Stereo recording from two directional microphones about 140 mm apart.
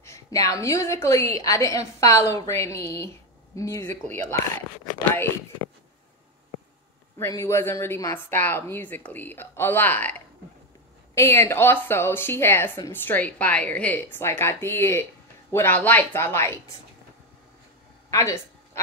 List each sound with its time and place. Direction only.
0.0 s a woman's voice: 20° left (ahead or behind)
7.2 s a woman's voice: 20° left (ahead or behind)
18.1 s speech: 20° left (ahead or behind)